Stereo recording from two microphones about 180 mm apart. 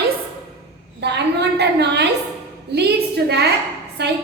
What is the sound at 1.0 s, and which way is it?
A woman's voice, 70° right (ahead or behind).